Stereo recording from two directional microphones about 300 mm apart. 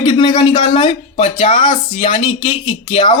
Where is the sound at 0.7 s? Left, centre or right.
Left.